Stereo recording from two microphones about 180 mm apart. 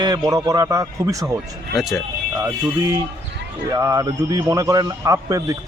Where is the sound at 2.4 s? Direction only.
15° right (ahead or behind).